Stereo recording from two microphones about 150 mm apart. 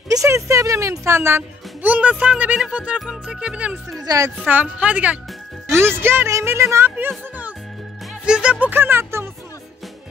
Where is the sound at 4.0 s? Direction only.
20° right (ahead or behind).